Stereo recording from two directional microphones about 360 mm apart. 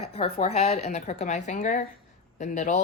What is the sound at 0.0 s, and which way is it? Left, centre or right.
Speech, centre.